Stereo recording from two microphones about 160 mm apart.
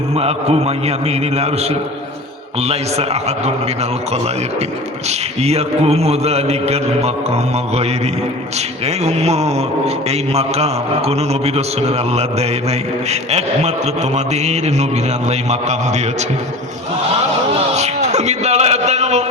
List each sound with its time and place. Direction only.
0.2 s a man's voice: 40° right (ahead or behind)
2.6 s a man's voice: 40° right (ahead or behind)
5.0 s a man's voice: 40° right (ahead or behind)
9.0 s a man's voice: 40° right (ahead or behind)
17.7 s music: 45° right (ahead or behind)